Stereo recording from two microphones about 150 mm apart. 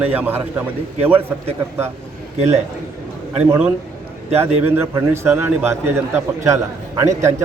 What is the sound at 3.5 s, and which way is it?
A man's voice, 10° right (ahead or behind).